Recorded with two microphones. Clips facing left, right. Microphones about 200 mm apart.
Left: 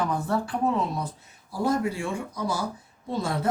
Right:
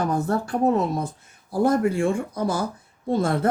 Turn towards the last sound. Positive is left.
turn(degrees=-55)  # may be behind; listen again after turning